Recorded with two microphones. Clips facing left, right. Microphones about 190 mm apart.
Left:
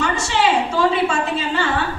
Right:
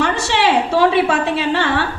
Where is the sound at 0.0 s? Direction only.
70° right (ahead or behind).